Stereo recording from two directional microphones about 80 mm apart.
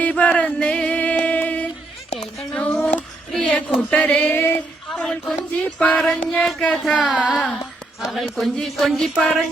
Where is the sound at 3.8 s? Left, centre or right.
Centre.